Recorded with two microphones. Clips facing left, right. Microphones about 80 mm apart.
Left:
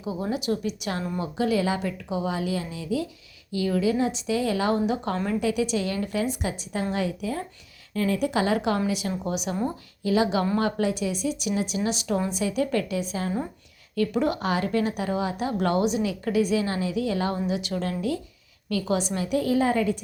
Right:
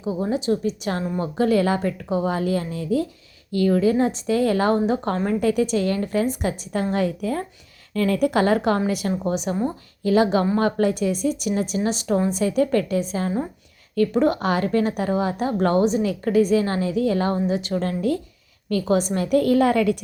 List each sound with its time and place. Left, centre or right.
0.0 s a woman's voice: right
9.1 s a woman's voice: right